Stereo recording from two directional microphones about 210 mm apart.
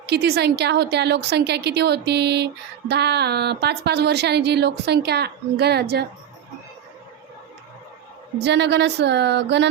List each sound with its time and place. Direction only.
0.0 s speech: 50° right (ahead or behind)
8.4 s speech: 55° right (ahead or behind)